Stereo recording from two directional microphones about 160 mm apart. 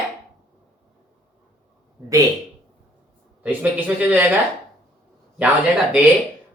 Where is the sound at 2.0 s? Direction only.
20° right (ahead or behind).